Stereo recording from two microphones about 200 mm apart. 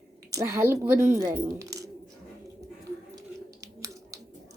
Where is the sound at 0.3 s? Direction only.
15° right (ahead or behind).